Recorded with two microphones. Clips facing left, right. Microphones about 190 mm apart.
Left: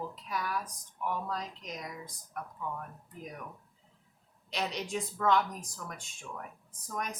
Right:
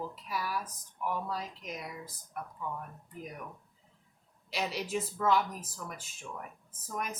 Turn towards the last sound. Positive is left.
turn(degrees=-5)  # may be behind; listen again after turning